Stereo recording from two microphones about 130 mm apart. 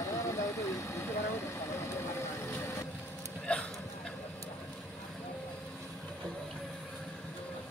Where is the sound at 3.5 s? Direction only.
10° left (ahead or behind).